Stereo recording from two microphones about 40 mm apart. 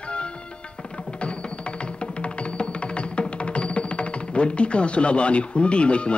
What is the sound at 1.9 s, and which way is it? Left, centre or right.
Music, left.